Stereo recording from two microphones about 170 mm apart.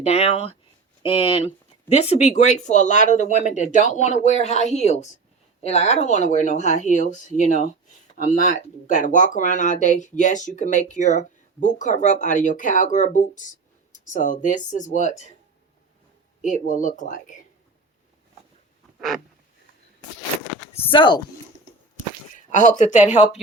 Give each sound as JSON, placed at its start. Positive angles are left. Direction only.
{"t": 0.0, "sound": "speech", "side_deg": 40}
{"t": 16.4, "sound": "speech", "side_deg": 45}
{"t": 18.9, "sound": "a sound", "side_deg": 0}
{"t": 20.7, "sound": "speech", "side_deg": 30}
{"t": 22.4, "sound": "speech", "side_deg": 45}